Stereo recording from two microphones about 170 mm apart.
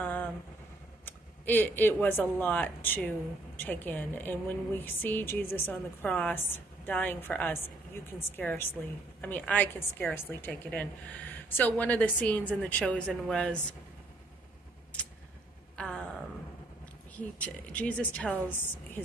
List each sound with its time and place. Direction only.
0.0 s vehicle: 10° left (ahead or behind)
1.0 s a woman's voice: 10° left (ahead or behind)
15.7 s a sound: 5° left (ahead or behind)
17.1 s a woman's voice: 10° left (ahead or behind)